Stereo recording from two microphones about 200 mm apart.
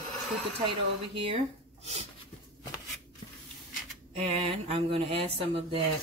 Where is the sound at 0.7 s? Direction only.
30° right (ahead or behind).